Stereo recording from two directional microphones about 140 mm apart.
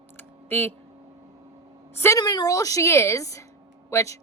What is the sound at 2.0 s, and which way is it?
Speech, 25° left (ahead or behind).